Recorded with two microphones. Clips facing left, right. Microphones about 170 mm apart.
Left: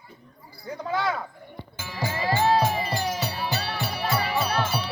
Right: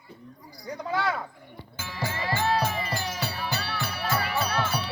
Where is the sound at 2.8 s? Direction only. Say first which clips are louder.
Left 4 dB; 15° left (ahead or behind).